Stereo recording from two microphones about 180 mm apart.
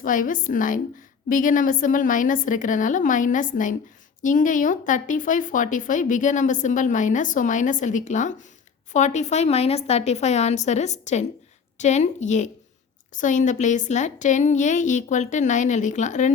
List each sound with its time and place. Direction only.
0.0 s a woman's voice: 50° left (ahead or behind)